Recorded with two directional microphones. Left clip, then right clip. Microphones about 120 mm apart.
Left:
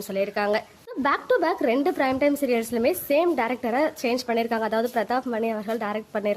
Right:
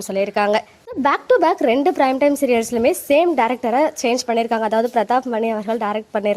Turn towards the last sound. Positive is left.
turn(degrees=-35)  # may be behind; listen again after turning